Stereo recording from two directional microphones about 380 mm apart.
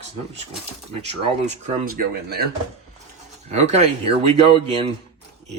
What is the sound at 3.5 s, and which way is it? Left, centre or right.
Speech, centre.